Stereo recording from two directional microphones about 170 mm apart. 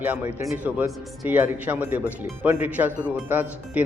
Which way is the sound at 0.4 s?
10° right (ahead or behind).